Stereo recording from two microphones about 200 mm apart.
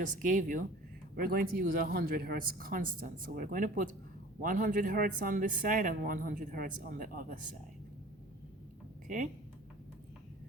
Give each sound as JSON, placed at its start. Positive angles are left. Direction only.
{"t": 0.0, "sound": "a man's voice", "side_deg": -40}